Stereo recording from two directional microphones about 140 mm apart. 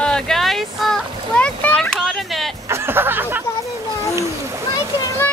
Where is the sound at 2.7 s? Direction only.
15° right (ahead or behind).